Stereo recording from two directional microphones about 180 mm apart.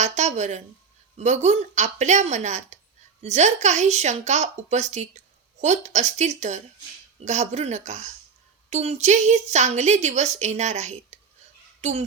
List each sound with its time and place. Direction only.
0.0 s a child's voice: 40° right (ahead or behind)